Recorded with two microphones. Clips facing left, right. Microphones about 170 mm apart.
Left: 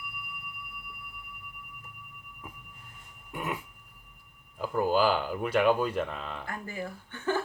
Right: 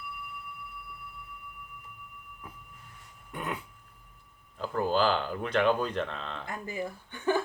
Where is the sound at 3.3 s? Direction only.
10° left (ahead or behind).